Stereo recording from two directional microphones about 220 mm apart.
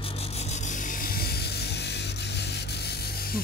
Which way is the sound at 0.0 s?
25° left (ahead or behind).